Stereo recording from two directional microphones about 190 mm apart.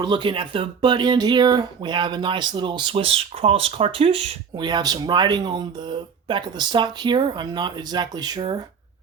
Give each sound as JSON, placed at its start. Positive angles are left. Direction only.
{"t": 0.0, "sound": "speech", "side_deg": -25}